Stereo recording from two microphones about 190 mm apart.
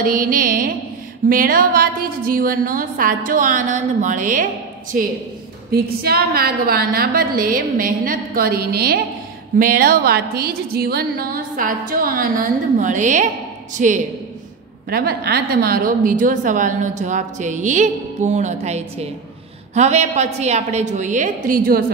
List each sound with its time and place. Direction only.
0.0 s a woman's voice: 45° right (ahead or behind)
14.9 s a woman's voice: 55° right (ahead or behind)